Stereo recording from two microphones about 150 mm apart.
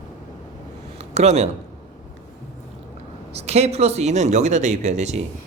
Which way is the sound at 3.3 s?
45° right (ahead or behind).